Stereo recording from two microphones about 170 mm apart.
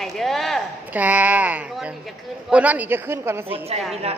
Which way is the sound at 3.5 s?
35° right (ahead or behind).